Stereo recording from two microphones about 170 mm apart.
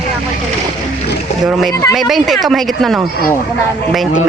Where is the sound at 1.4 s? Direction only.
Centre (ahead or behind).